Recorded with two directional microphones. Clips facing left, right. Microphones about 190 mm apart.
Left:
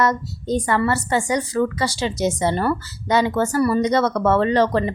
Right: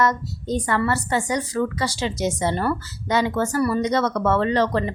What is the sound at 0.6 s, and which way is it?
A woman's voice, 25° left (ahead or behind).